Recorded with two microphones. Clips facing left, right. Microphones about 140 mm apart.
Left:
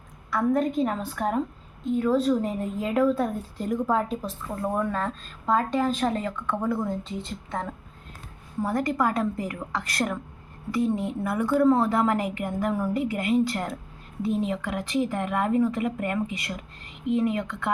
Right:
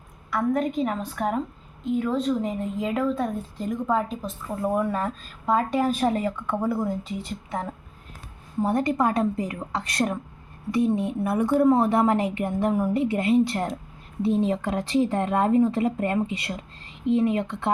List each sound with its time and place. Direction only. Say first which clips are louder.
0.3 s a woman's voice: left 1 dB; centre (ahead or behind)
8.6 s a woman's voice: right 2 dB; 25° right (ahead or behind)